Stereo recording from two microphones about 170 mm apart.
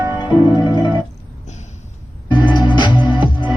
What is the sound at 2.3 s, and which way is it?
Music, 30° left (ahead or behind).